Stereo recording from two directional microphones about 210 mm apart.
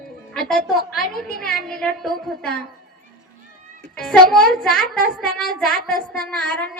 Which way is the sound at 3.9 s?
Centre (ahead or behind).